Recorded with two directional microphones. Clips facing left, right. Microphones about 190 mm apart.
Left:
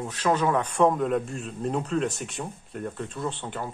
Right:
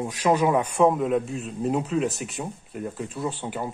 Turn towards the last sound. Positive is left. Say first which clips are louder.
# right 2 dB
turn(degrees=-10)  # may be behind; listen again after turning